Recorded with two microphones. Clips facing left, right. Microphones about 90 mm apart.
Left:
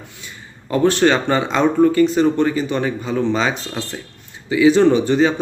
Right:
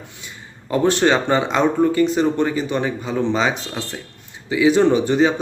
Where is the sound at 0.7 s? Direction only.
15° right (ahead or behind).